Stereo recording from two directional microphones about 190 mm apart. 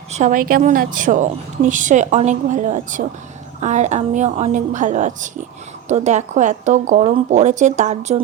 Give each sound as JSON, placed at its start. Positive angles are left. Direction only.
{"t": 0.1, "sound": "a woman's voice", "side_deg": -40}